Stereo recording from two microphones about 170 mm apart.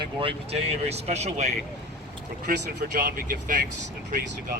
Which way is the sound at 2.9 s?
55° right (ahead or behind).